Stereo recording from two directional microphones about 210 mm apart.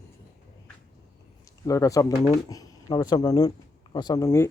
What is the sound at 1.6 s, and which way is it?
Speech, 15° left (ahead or behind).